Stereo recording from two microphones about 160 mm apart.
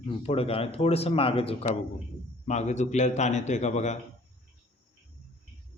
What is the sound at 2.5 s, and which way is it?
A man's voice, 45° left (ahead or behind).